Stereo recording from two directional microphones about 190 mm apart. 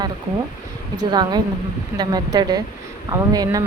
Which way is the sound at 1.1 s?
20° right (ahead or behind).